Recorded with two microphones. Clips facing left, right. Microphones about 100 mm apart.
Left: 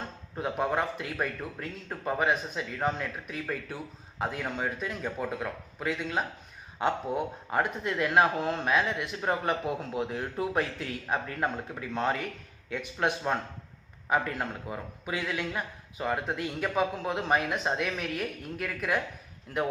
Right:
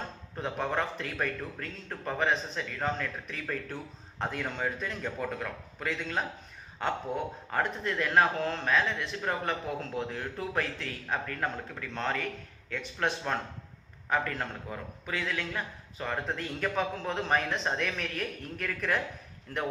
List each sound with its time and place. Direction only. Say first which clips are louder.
0.3 s a man's voice: left 3 dB; 10° left (ahead or behind)
7.5 s a man's voice: left 2 dB; 15° left (ahead or behind)